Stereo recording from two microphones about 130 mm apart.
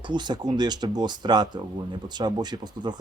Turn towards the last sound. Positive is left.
turn(degrees=-35)  # may be behind; listen again after turning